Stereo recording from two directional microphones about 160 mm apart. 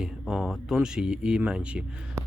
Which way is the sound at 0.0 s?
5° right (ahead or behind).